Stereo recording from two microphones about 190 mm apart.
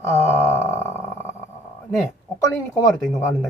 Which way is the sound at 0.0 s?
15° left (ahead or behind).